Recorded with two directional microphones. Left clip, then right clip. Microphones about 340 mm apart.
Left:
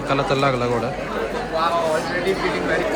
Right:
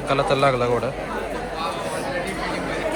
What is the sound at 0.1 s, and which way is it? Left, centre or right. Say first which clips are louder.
Speech: right 1 dB; centre.